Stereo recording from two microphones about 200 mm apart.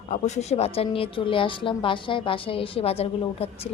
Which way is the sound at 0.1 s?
35° left (ahead or behind).